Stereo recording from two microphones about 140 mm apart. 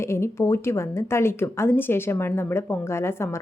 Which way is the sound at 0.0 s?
20° left (ahead or behind).